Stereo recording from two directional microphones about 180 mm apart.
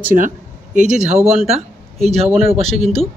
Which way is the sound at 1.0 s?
35° right (ahead or behind).